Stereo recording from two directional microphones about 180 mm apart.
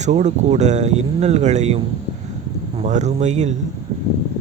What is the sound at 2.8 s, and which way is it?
Speech, 40° right (ahead or behind).